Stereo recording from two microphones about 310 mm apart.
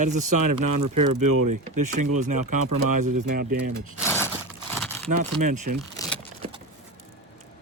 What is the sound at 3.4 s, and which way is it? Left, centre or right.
Speech, right.